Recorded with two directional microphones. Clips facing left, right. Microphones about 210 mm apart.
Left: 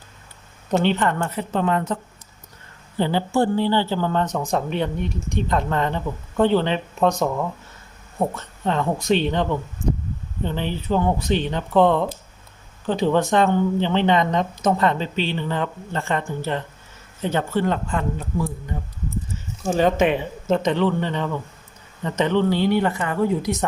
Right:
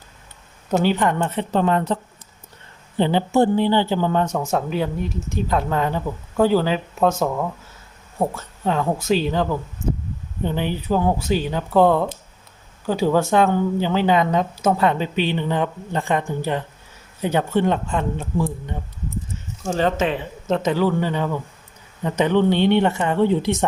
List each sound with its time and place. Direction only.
0.9 s speech: 15° right (ahead or behind)
1.3 s a woman's voice: 30° right (ahead or behind)
3.0 s speech: 20° right (ahead or behind)
19.6 s speech: 15° left (ahead or behind)
20.5 s speech: 5° right (ahead or behind); by 23.6 s 25° right (ahead or behind)